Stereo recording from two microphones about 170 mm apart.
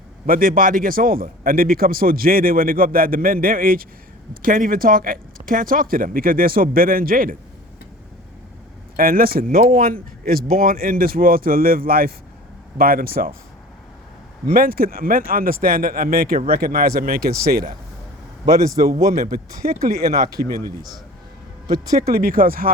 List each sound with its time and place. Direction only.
0.3 s speech: 55° right (ahead or behind)
9.0 s speech: 60° right (ahead or behind)
14.5 s speech: 60° right (ahead or behind)
18.4 s a man's voice: 20° right (ahead or behind)
19.1 s speech: 60° right (ahead or behind)
22.0 s speech: 60° right (ahead or behind)